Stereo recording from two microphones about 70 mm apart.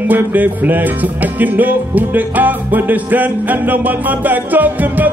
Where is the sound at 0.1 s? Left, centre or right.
Right.